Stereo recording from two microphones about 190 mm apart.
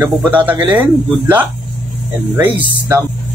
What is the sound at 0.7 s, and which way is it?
Speech, 20° right (ahead or behind).